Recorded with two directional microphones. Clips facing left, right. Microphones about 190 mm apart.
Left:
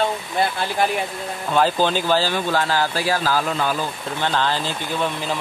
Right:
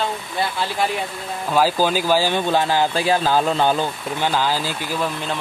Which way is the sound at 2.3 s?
20° right (ahead or behind).